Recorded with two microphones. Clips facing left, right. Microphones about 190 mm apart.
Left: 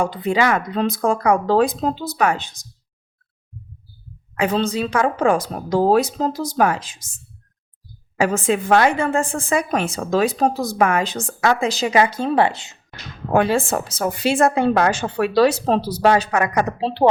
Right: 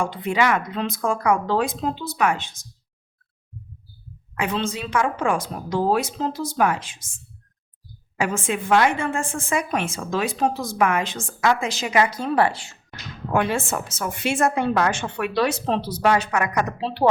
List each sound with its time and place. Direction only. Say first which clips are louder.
0.0 s a woman's voice: left 3 dB; 35° left (ahead or behind)
4.4 s a woman's voice: left 6 dB; 40° left (ahead or behind)
8.2 s a woman's voice: left 6 dB; 35° left (ahead or behind); by 12.7 s 20° left (ahead or behind)
13.3 s a woman's voice: left 5 dB; 35° left (ahead or behind)